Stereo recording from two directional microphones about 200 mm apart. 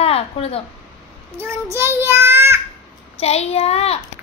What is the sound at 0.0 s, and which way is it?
Speech, 30° left (ahead or behind).